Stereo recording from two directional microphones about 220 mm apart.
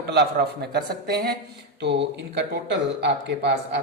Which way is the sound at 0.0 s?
45° right (ahead or behind).